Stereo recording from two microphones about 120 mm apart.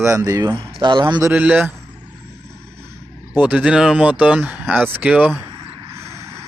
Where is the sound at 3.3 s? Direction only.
10° right (ahead or behind).